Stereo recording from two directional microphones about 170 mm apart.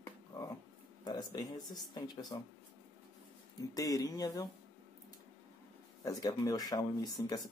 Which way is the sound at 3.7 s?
20° left (ahead or behind).